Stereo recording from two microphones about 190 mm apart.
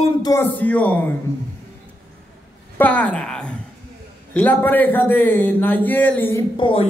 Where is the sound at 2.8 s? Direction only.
5° left (ahead or behind).